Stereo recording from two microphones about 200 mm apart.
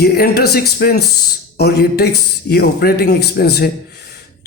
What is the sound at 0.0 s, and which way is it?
Speech, 55° left (ahead or behind).